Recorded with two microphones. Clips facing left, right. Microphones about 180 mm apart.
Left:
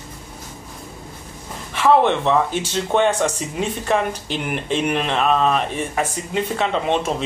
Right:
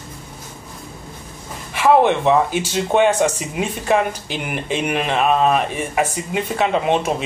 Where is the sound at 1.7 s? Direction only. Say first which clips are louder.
Right 1 dB; 10° right (ahead or behind).